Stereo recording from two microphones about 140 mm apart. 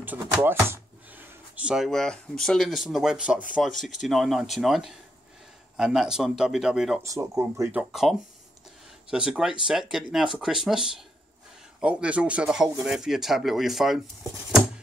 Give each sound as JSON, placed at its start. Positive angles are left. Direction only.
{"t": 0.3, "sound": "speech", "side_deg": -15}
{"t": 7.0, "sound": "speech", "side_deg": -20}
{"t": 7.7, "sound": "speech", "side_deg": -5}